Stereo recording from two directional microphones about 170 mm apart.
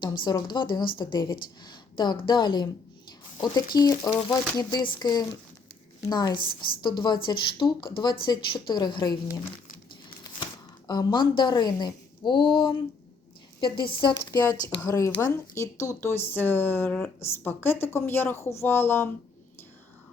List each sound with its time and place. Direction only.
0.0 s a woman's voice: 25° left (ahead or behind)
3.8 s a woman's voice: 20° left (ahead or behind)
10.8 s a woman's voice: 25° left (ahead or behind)
13.7 s a woman's voice: 30° left (ahead or behind); by 19.1 s 15° left (ahead or behind)